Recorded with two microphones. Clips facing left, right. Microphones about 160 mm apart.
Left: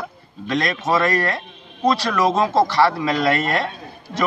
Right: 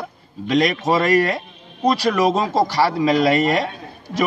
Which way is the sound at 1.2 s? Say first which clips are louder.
Right 4 dB; 15° right (ahead or behind).